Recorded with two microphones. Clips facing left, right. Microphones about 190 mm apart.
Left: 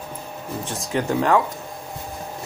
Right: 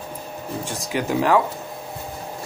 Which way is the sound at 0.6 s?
Centre (ahead or behind).